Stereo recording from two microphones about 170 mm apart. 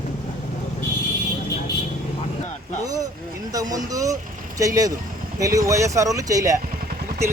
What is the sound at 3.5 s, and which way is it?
Speech, 20° right (ahead or behind).